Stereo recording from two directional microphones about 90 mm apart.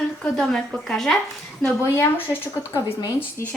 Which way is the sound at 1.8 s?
30° left (ahead or behind).